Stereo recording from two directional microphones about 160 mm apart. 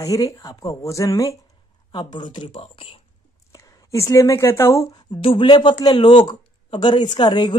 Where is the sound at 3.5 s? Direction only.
20° left (ahead or behind).